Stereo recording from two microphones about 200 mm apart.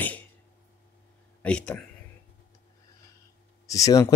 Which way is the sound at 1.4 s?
5° left (ahead or behind).